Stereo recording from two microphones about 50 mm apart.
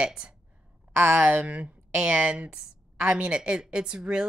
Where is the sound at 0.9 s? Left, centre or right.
Right.